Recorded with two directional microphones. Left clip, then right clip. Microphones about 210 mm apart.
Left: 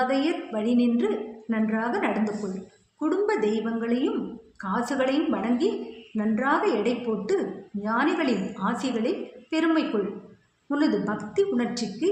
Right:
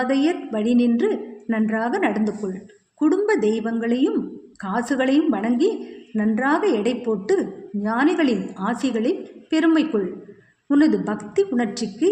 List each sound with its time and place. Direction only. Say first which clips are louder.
0.0 s a woman's voice: right 4 dB; 45° right (ahead or behind)